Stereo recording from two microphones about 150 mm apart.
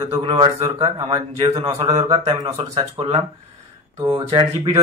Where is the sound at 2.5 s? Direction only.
40° right (ahead or behind).